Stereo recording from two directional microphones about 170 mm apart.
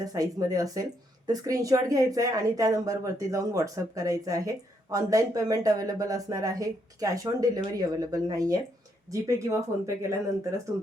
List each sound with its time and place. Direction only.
0.0 s speech: 20° right (ahead or behind)